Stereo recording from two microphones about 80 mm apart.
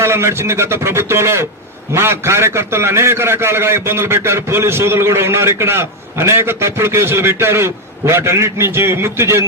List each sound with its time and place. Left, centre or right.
0.0 s a man's voice: right